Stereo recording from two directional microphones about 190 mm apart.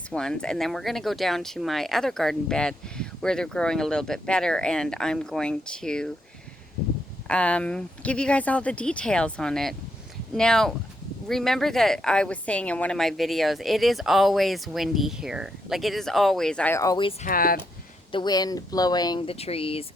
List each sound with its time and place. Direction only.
0.1 s speech: 5° left (ahead or behind)
7.3 s speech: 5° left (ahead or behind); by 17.2 s 25° left (ahead or behind)
17.2 s speech: 50° left (ahead or behind)
18.1 s speech: 20° left (ahead or behind)